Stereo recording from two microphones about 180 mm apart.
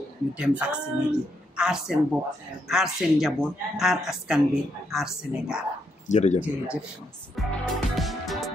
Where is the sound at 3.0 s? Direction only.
5° right (ahead or behind).